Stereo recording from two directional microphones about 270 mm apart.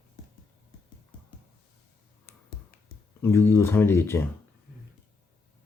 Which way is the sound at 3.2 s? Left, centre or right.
Centre.